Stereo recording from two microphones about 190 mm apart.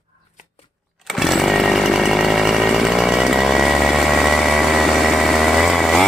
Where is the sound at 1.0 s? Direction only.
Centre (ahead or behind).